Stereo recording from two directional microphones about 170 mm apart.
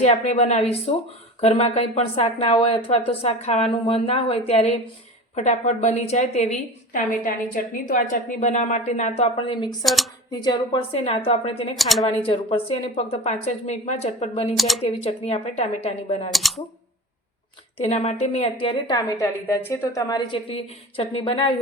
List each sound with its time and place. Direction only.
0.0 s a woman's voice: 40° left (ahead or behind)
9.8 s speech: centre (ahead or behind)
10.4 s speech: 30° left (ahead or behind)
11.8 s speech: centre (ahead or behind)
12.0 s speech: 35° left (ahead or behind)
14.5 s speech: centre (ahead or behind)
15.0 s speech: 35° left (ahead or behind)
16.3 s speech: centre (ahead or behind)
17.7 s a woman's voice: 35° left (ahead or behind)